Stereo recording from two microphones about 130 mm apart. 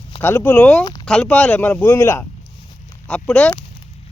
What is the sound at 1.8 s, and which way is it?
Speech, 25° left (ahead or behind).